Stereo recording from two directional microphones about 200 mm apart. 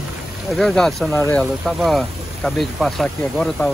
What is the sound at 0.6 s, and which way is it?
Speech, centre (ahead or behind).